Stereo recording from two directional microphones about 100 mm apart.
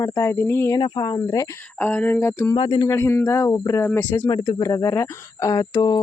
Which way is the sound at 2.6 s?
55° left (ahead or behind).